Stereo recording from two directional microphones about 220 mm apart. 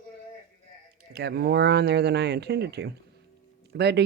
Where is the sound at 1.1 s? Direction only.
45° right (ahead or behind).